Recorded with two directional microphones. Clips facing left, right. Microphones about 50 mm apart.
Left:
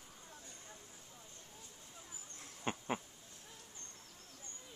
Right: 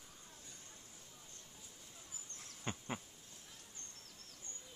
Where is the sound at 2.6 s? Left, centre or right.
Centre.